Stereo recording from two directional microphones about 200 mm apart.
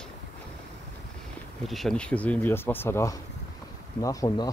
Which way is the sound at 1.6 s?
Centre (ahead or behind).